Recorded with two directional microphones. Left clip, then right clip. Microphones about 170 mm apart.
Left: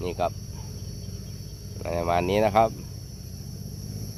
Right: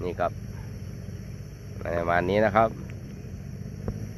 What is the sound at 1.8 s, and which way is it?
Speech, 15° left (ahead or behind).